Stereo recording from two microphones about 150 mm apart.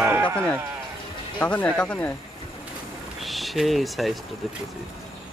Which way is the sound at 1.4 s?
10° left (ahead or behind).